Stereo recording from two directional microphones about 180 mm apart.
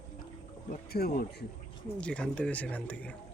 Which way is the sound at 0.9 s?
60° left (ahead or behind).